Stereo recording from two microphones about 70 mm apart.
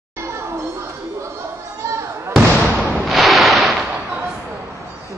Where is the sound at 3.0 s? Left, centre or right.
Centre.